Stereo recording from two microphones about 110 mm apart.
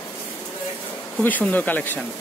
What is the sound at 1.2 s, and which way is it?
Speech, 15° left (ahead or behind).